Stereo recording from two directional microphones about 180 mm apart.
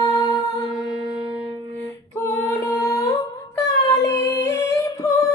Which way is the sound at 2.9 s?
20° left (ahead or behind).